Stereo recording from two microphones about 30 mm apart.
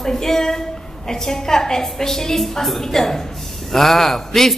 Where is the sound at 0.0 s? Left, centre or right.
Centre.